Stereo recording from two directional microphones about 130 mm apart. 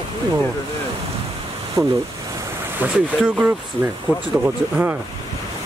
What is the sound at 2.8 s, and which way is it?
Speech, 10° right (ahead or behind).